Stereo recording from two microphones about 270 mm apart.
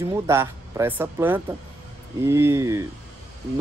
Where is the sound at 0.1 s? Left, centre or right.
Centre.